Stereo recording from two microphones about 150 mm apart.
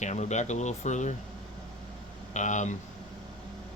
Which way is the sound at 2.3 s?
55° left (ahead or behind).